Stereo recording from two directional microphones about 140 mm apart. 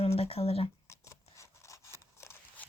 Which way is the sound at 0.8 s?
20° left (ahead or behind).